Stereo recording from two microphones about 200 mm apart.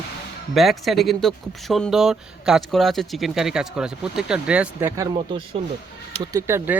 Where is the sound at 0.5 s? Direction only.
Centre (ahead or behind).